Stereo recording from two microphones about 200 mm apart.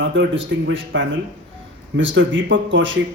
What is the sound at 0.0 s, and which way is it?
A man's voice, 70° right (ahead or behind).